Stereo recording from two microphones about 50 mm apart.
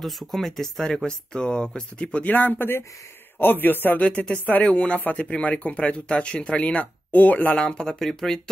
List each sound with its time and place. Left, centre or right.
0.0 s speech: centre
2.2 s a man's voice: left
4.0 s speech: left
7.5 s speech: centre